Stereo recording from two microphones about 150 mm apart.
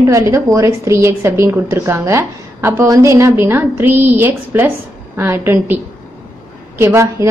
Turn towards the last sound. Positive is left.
turn(degrees=-20)  # may be behind; listen again after turning